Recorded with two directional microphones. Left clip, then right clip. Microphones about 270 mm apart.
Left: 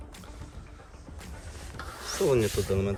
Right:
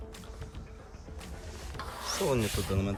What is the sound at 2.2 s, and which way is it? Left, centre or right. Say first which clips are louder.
Speech: left 6 dB; centre.